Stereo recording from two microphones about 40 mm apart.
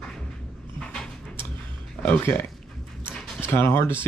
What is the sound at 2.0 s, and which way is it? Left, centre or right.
Speech, left.